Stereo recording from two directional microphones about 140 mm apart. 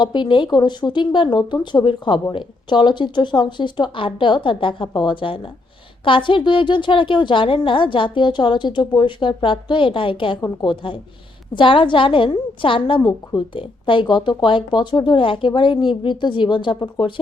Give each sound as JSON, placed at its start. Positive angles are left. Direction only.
{"t": 0.0, "sound": "a woman's voice", "side_deg": 35}